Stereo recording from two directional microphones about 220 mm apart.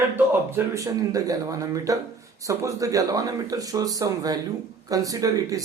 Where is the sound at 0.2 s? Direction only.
10° right (ahead or behind).